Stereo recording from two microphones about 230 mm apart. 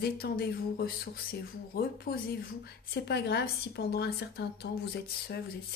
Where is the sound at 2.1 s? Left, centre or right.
Left.